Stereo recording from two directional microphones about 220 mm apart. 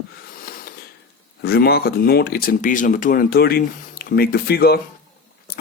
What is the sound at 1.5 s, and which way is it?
Speech, 45° left (ahead or behind).